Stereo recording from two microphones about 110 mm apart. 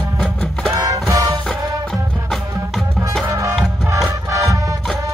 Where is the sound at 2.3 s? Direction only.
Centre (ahead or behind).